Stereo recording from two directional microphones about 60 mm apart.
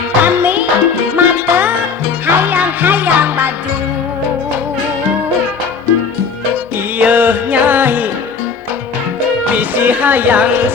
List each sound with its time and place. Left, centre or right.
0.2 s music: right
7.0 s music: right
9.5 s music: right